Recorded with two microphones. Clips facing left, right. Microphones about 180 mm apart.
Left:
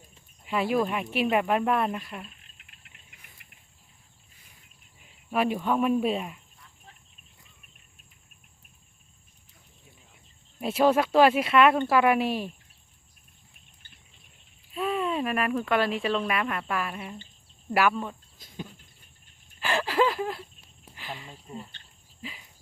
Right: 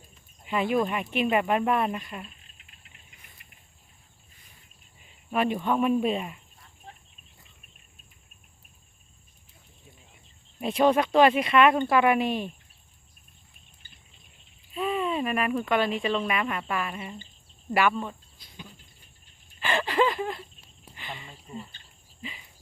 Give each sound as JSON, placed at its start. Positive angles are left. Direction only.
{"t": 0.4, "sound": "speech", "side_deg": 0}
{"t": 2.6, "sound": "insect", "side_deg": 60}
{"t": 5.3, "sound": "speech", "side_deg": 5}
{"t": 10.6, "sound": "speech", "side_deg": 5}
{"t": 14.7, "sound": "speech", "side_deg": 0}
{"t": 18.3, "sound": "a sound", "side_deg": 45}
{"t": 19.5, "sound": "a sound", "side_deg": 0}